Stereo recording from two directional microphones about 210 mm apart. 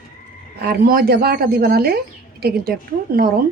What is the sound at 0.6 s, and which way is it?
Speech, 50° right (ahead or behind).